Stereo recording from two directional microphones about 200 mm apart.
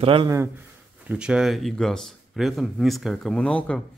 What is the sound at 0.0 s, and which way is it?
Speech, 25° right (ahead or behind).